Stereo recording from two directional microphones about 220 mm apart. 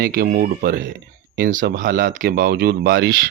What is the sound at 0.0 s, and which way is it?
Speech, 40° right (ahead or behind).